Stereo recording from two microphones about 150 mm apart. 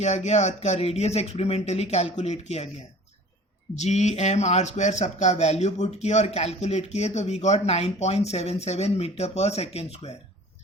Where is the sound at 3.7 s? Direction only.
50° left (ahead or behind).